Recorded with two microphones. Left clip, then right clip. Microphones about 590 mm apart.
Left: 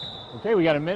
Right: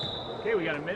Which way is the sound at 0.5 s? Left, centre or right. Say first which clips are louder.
Left 9 dB; left.